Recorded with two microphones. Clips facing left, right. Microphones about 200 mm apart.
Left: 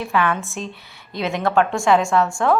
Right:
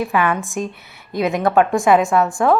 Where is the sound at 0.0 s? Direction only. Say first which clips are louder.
Right 2 dB; 15° right (ahead or behind).